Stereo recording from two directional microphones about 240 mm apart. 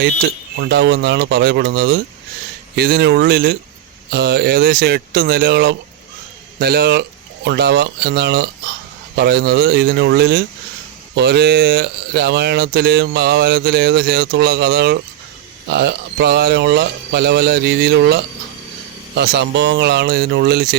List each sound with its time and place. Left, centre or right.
0.7 s speech: right